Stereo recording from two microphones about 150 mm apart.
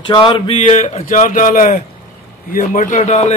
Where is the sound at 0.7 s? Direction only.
55° left (ahead or behind).